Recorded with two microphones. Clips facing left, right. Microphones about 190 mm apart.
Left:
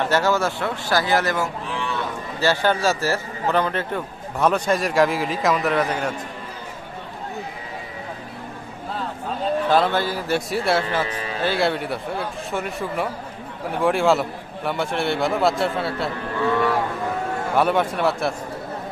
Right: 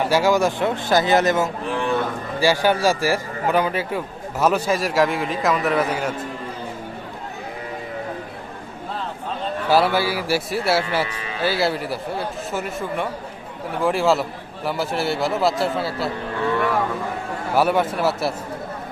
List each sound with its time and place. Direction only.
0.0 s a man's voice: 10° right (ahead or behind)
1.7 s cattle: 50° right (ahead or behind)
2.4 s a man's voice: 10° right (ahead or behind)
9.6 s a man's voice: 10° right (ahead or behind)
17.5 s a man's voice: 5° right (ahead or behind)